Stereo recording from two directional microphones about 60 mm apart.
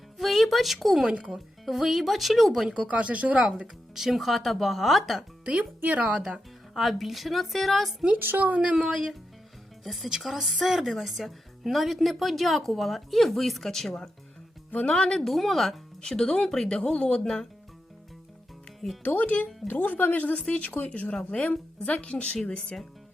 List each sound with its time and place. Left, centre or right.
0.2 s speech: centre
1.0 s speech: centre
1.6 s speech: centre
2.8 s speech: right
3.9 s speech: centre
5.5 s speech: right
6.7 s speech: centre
8.4 s speech: right
8.7 s speech: centre
14.7 s speech: centre
19.0 s speech: left; by 22.9 s centre